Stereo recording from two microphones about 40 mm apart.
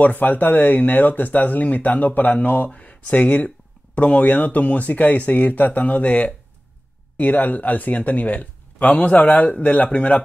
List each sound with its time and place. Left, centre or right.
0.0 s speech: left